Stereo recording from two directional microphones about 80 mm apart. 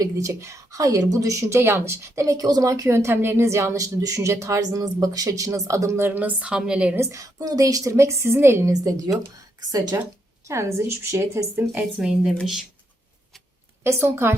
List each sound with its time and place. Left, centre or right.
0.0 s a woman's voice: right; by 6.9 s centre
6.9 s a woman's voice: right
7.3 s a woman's voice: right
8.7 s a woman's voice: right
10.5 s a woman's voice: right
11.5 s a woman's voice: right
11.9 s a woman's voice: centre
13.8 s a woman's voice: right